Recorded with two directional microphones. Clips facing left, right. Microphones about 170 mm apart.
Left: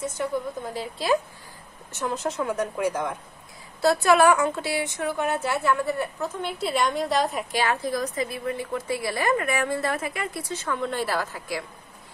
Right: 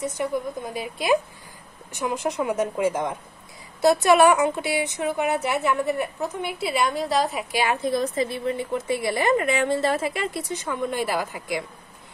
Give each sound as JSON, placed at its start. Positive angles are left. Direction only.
{"t": 0.0, "sound": "a woman's voice", "side_deg": -20}
{"t": 7.5, "sound": "a woman's voice", "side_deg": -15}